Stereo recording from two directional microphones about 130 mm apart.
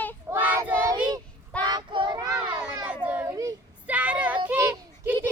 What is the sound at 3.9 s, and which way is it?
Child singing, 10° right (ahead or behind).